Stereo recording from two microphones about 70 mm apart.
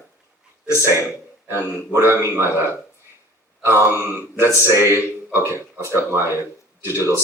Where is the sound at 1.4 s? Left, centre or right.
Right.